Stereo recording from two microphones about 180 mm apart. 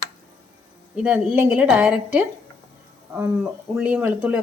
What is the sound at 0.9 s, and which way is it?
Speech, 10° right (ahead or behind).